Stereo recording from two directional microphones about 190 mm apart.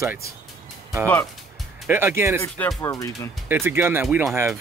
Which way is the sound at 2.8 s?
15° left (ahead or behind).